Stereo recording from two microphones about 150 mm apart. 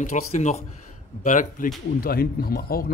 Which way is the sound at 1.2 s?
60° left (ahead or behind).